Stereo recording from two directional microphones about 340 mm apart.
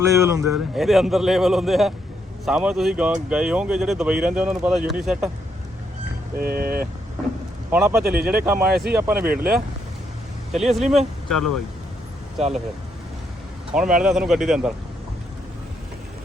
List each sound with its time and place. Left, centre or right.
0.0 s speech: centre
6.3 s speech: right
7.7 s speech: centre
9.1 s speech: right
10.5 s speech: centre
12.4 s speech: centre
13.7 s speech: centre